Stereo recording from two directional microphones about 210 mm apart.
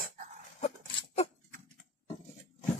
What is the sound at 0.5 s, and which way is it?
Dog, 30° left (ahead or behind).